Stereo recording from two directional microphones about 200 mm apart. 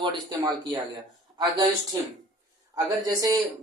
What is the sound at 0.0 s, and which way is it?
Speech, 20° right (ahead or behind).